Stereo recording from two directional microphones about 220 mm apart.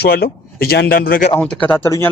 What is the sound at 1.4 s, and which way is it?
Speech, 5° left (ahead or behind).